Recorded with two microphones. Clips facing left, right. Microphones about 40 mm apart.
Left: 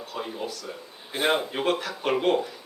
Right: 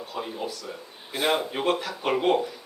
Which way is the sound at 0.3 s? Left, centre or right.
Centre.